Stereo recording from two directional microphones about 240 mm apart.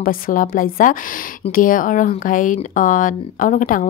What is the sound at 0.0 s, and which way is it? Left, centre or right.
Speech, left.